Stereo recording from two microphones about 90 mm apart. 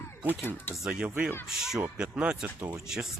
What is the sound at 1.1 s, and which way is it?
Speech, 20° right (ahead or behind).